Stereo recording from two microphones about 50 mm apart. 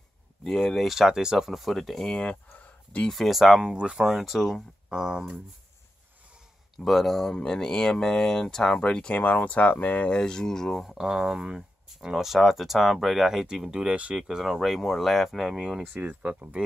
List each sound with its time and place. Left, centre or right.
0.4 s speech: centre
0.8 s speech: centre
1.5 s speech: centre
1.8 s speech: centre
3.6 s speech: right
3.9 s speech: centre
4.8 s speech: centre
6.8 s speech: centre; by 10.0 s left
10.0 s speech: centre
11.0 s speech: centre
13.9 s speech: right
14.2 s speech: centre
15.9 s speech: right